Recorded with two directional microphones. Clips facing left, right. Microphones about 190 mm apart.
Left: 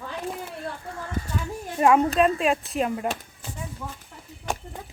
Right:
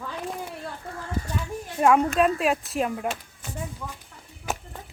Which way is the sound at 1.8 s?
Centre (ahead or behind).